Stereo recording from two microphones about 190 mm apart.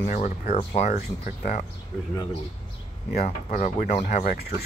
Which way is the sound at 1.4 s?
45° left (ahead or behind).